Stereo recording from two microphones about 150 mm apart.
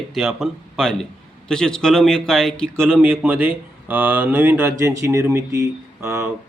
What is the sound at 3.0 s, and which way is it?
A man's voice, 10° right (ahead or behind).